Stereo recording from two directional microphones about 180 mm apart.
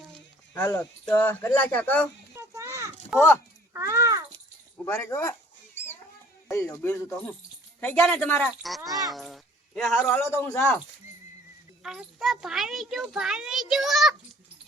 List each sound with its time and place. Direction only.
0.5 s speech: 15° left (ahead or behind)
2.3 s a sound: 15° right (ahead or behind)
3.1 s a child's voice: 5° right (ahead or behind)
3.7 s a sound: 15° right (ahead or behind)
4.9 s a sound: 15° left (ahead or behind)
6.5 s speech: 15° left (ahead or behind)
8.8 s a child's voice: 20° right (ahead or behind)
9.1 s speech: centre (ahead or behind)
11.8 s a child's voice: 5° right (ahead or behind)